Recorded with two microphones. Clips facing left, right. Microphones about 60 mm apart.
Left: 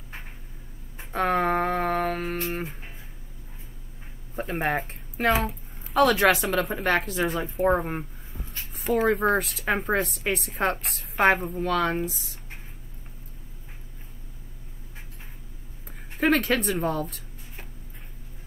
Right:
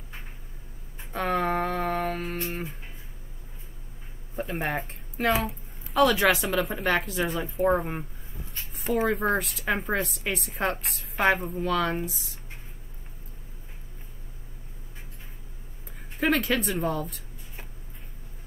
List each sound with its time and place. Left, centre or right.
1.1 s a sound: centre
1.7 s humming: centre
4.4 s a woman's voice: centre
16.2 s speech: centre